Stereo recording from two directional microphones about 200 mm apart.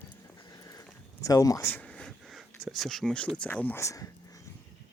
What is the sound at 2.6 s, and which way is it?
Speech, centre (ahead or behind).